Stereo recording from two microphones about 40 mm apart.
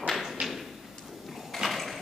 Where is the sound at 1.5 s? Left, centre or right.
Centre.